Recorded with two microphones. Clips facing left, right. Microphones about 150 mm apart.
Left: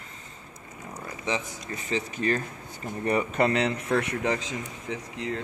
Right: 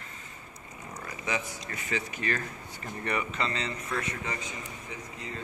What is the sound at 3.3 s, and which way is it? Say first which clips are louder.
A man's voice: left 9 dB; 60° left (ahead or behind).